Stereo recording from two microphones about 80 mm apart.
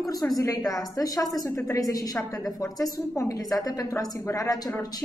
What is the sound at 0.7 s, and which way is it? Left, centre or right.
Speech, left.